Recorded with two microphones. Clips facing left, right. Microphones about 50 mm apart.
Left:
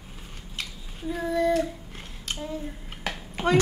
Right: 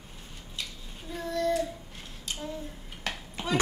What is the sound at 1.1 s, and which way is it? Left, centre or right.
Child singing, centre.